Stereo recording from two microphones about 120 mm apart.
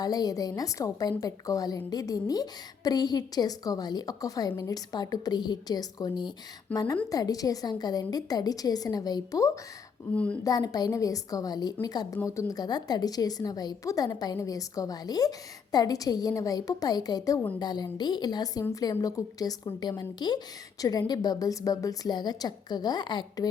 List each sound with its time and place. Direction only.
0.0 s a woman's voice: 30° left (ahead or behind)
6.7 s a woman's voice: 10° left (ahead or behind)
7.1 s a woman's voice: 30° left (ahead or behind)